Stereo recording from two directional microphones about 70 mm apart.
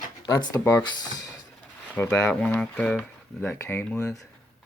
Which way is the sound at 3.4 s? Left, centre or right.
Left.